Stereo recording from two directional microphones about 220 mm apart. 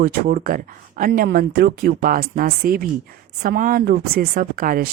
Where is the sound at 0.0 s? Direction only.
40° right (ahead or behind).